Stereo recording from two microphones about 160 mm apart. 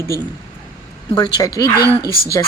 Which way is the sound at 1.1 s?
25° left (ahead or behind).